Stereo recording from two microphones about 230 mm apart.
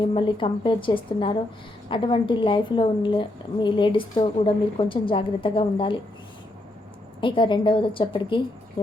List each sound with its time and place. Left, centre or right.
0.1 s a woman's voice: left
7.2 s a woman's voice: left